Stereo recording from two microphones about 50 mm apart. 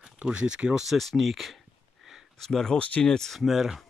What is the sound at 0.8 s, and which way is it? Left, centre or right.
Speech, centre.